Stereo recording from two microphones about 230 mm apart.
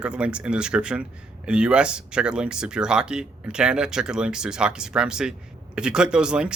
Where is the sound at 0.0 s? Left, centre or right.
Centre.